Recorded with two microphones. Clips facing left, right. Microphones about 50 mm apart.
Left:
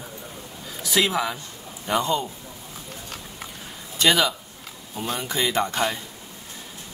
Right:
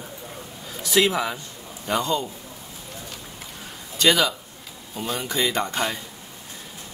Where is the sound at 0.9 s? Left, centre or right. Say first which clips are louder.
Right 2 dB; centre.